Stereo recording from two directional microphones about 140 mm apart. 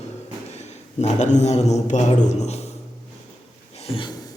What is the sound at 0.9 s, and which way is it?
A man's voice, 55° left (ahead or behind).